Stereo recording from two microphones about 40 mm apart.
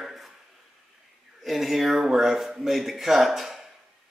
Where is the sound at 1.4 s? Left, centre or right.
Centre.